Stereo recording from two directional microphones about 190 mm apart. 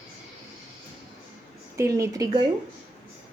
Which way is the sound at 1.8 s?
15° right (ahead or behind).